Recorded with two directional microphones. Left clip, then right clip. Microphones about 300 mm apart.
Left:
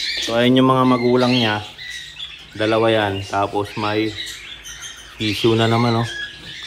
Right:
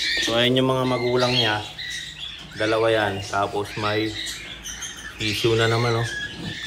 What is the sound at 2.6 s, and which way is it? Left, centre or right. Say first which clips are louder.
Speech: left 3 dB; left.